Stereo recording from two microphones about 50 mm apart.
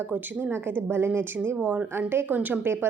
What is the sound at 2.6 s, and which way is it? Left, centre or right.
Speech, right.